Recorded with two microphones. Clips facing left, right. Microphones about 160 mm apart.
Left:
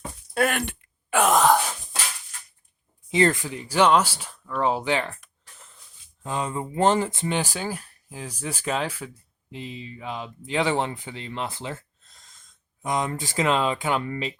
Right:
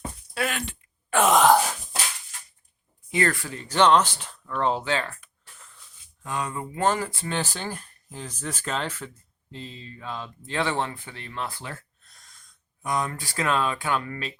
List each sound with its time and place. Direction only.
0.3 s speech: 55° left (ahead or behind)
1.1 s speech: centre (ahead or behind)
3.1 s speech: 25° left (ahead or behind)
6.2 s speech: 25° left (ahead or behind)